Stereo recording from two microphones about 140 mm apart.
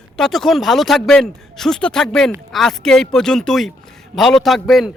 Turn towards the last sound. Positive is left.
turn(degrees=0)  # may be behind; listen again after turning